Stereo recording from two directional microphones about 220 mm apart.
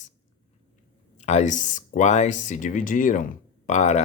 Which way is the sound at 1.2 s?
30° left (ahead or behind).